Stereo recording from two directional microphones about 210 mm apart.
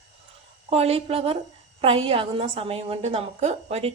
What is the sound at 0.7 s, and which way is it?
Speech, 30° right (ahead or behind).